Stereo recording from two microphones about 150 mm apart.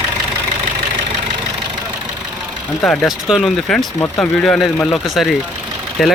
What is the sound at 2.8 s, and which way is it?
Speech, 10° left (ahead or behind).